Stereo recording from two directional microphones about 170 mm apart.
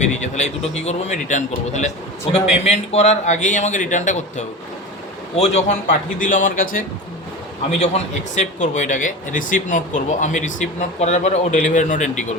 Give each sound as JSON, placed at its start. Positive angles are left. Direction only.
{"t": 0.0, "sound": "a man's voice", "side_deg": 45}
{"t": 6.1, "sound": "speech", "side_deg": 50}
{"t": 8.4, "sound": "speech", "side_deg": 45}